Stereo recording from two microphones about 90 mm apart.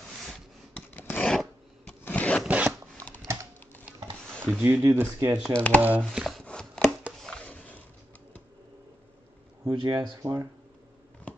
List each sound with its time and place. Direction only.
0.9 s a sound: 20° left (ahead or behind)
1.2 s filing: 5° left (ahead or behind)
2.0 s a sound: 15° left (ahead or behind)
2.4 s zipper: 15° right (ahead or behind)
4.4 s speech: 15° right (ahead or behind)
4.8 s speech: 30° right (ahead or behind)
5.5 s speech: 15° left (ahead or behind)
5.8 s speech: 20° right (ahead or behind)
6.1 s chopping: centre (ahead or behind)
7.2 s a sound: 5° left (ahead or behind)
9.8 s speech: 45° right (ahead or behind)